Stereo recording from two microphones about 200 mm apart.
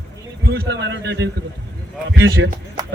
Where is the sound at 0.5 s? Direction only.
60° right (ahead or behind).